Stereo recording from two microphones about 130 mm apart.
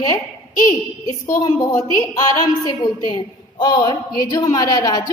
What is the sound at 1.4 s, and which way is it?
A woman's voice, 25° left (ahead or behind).